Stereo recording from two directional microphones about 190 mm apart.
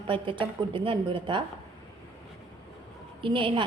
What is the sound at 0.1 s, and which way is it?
A woman's voice, 30° right (ahead or behind).